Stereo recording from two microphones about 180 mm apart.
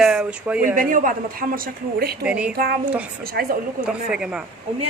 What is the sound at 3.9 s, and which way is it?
Speech, 5° right (ahead or behind).